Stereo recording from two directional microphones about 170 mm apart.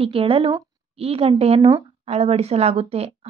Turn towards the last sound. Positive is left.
turn(degrees=-35)  # may be behind; listen again after turning